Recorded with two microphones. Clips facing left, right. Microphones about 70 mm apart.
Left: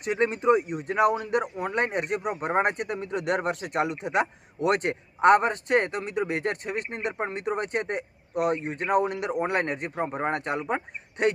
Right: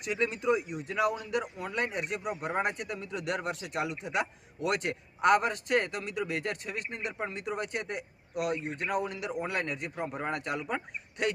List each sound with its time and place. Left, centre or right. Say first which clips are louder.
0.0 s speech: left 6 dB; left